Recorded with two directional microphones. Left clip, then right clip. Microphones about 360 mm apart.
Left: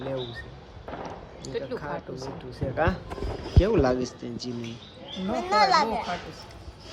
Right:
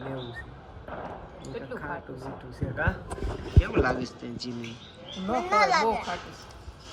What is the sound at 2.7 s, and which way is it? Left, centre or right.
Speech, centre.